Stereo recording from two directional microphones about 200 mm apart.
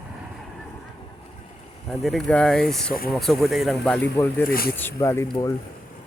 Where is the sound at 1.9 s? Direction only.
Centre (ahead or behind).